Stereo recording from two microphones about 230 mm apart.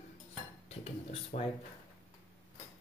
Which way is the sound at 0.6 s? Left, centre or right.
Left.